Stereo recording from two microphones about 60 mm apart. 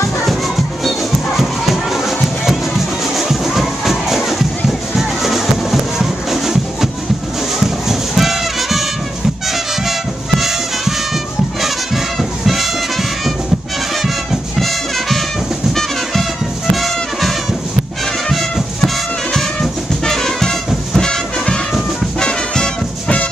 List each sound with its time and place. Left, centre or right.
0.8 s music: centre
7.9 s music: centre
19.3 s music: centre